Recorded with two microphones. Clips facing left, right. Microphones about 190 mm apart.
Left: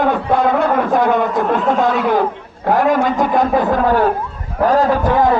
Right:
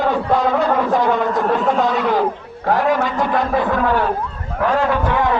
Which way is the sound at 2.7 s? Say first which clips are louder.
Left 3 dB; 50° left (ahead or behind).